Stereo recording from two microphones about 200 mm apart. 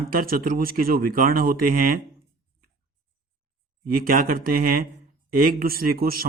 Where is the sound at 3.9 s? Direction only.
45° right (ahead or behind).